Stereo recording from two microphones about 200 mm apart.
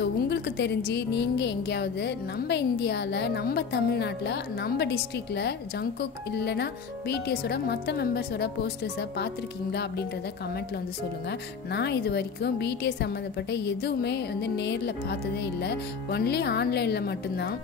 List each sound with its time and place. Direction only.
0.0 s a woman's voice: 55° left (ahead or behind)
11.2 s a woman's voice: 55° left (ahead or behind)